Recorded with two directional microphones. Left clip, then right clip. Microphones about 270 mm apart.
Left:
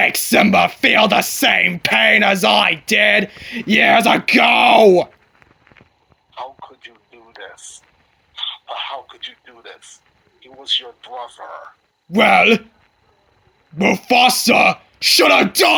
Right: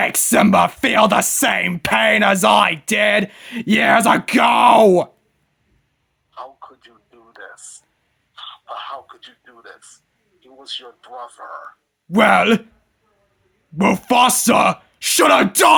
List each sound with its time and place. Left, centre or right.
0.0 s speech: right
6.3 s a sound: centre
10.4 s speech: centre
12.1 s speech: right
13.7 s speech: right